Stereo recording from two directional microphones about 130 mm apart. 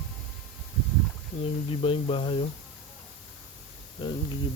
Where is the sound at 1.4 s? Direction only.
45° left (ahead or behind).